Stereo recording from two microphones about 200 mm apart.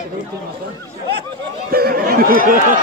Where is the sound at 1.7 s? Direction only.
50° right (ahead or behind).